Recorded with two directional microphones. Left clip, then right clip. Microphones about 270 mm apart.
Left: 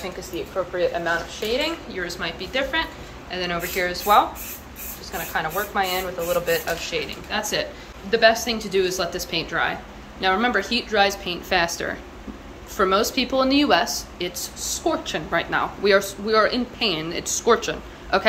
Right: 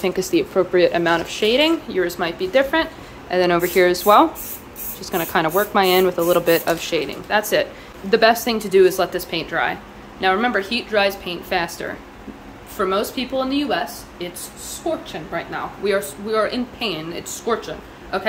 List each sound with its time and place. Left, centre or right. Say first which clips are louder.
0.7 s speech: right 6 dB; right
5.3 s a woman's voice: right 6 dB; right; by 18.2 s centre